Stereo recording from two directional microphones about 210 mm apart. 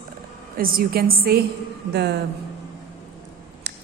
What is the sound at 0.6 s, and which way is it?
Speech, 45° right (ahead or behind).